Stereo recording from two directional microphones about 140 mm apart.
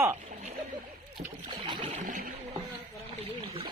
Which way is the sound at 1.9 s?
65° right (ahead or behind).